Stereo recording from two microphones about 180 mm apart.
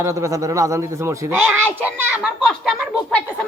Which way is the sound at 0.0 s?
15° right (ahead or behind).